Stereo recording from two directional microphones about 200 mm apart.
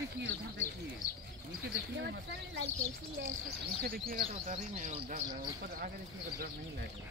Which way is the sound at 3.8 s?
50° right (ahead or behind).